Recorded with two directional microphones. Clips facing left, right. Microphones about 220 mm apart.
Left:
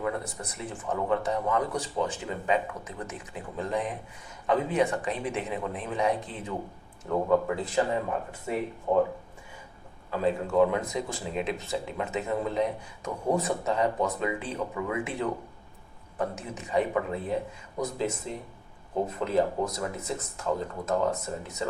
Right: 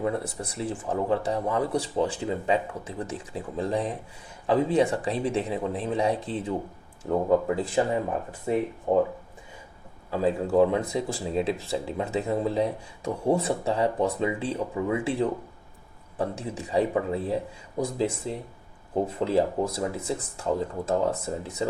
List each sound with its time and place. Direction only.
0.0 s speech: 30° right (ahead or behind)
8.9 s speech: 35° right (ahead or behind)
10.1 s speech: 35° right (ahead or behind)